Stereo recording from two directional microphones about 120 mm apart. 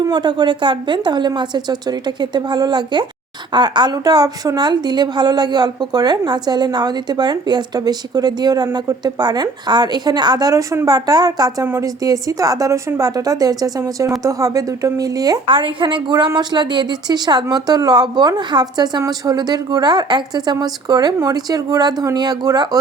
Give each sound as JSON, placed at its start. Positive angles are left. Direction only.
{"t": 0.0, "sound": "a woman's voice", "side_deg": -40}
{"t": 11.6, "sound": "a woman's voice", "side_deg": -20}
{"t": 12.0, "sound": "a woman's voice", "side_deg": -30}
{"t": 15.4, "sound": "a woman's voice", "side_deg": -45}